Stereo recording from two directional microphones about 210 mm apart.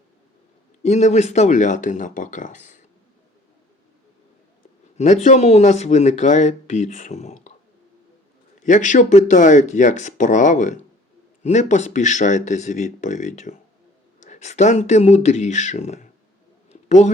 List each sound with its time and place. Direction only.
0.8 s speech: 35° left (ahead or behind)
4.9 s speech: 35° left (ahead or behind)
8.6 s speech: 35° left (ahead or behind)
16.6 s a sound: 35° left (ahead or behind)